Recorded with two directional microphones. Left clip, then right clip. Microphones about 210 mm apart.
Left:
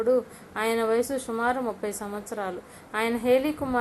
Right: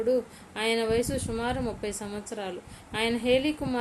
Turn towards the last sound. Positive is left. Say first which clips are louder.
# left 2 dB
turn(degrees=-5)  # may be behind; listen again after turning